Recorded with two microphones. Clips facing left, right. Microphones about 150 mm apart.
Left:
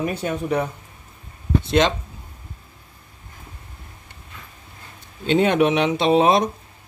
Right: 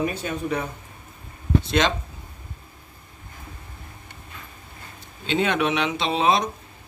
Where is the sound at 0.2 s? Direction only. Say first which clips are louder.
Left 4 dB; 35° left (ahead or behind).